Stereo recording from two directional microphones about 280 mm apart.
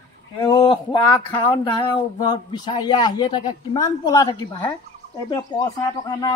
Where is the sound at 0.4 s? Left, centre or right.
Centre.